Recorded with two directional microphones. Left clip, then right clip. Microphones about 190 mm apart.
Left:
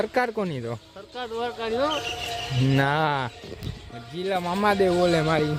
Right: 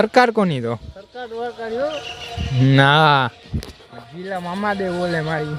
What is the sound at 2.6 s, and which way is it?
Speech, 25° right (ahead or behind).